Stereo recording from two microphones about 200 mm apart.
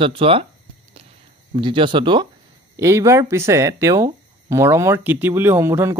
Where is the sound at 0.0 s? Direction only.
25° right (ahead or behind).